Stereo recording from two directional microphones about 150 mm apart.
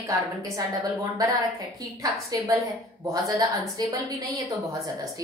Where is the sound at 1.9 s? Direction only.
20° right (ahead or behind).